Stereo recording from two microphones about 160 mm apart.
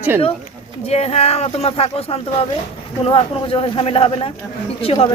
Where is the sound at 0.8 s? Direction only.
40° left (ahead or behind).